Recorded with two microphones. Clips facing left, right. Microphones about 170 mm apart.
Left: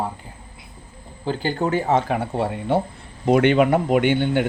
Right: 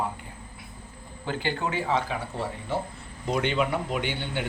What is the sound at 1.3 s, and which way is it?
A man's voice, 35° left (ahead or behind).